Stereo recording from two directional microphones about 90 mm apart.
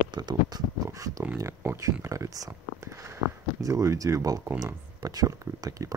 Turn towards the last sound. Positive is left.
turn(degrees=-40)  # may be behind; listen again after turning